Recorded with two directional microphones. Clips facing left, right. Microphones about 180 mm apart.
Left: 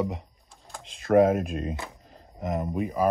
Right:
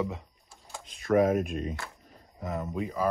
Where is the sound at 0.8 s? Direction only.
30° left (ahead or behind).